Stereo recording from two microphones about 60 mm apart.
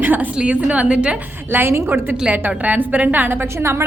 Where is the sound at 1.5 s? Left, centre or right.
Right.